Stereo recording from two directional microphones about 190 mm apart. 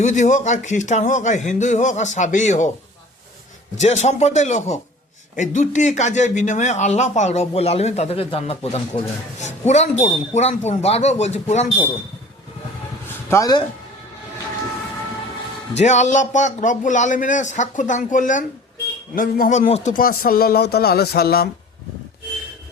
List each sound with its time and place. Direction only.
0.0 s speech: 40° left (ahead or behind)
3.8 s speech: 35° left (ahead or behind)
13.3 s speech: 20° left (ahead or behind)
15.8 s speech: 40° left (ahead or behind); by 21.5 s 55° left (ahead or behind)